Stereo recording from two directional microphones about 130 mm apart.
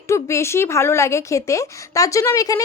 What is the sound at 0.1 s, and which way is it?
A woman's voice, 20° left (ahead or behind).